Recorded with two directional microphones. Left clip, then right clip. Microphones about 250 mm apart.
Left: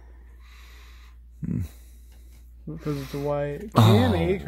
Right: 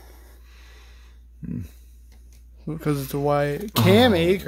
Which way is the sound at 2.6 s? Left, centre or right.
Right.